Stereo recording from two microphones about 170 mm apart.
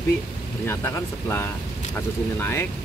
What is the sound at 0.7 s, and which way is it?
Speech, 15° left (ahead or behind).